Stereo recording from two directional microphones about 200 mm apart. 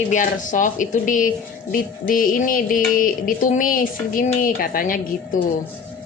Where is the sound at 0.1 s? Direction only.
40° left (ahead or behind).